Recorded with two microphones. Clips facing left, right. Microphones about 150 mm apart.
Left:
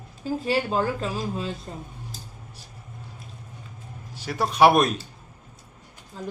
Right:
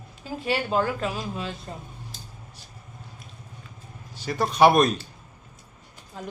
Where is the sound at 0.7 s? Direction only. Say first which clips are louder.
Even; 30° left (ahead or behind).